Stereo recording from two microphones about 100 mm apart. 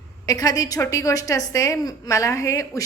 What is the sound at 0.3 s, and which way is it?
A woman's voice, 35° left (ahead or behind).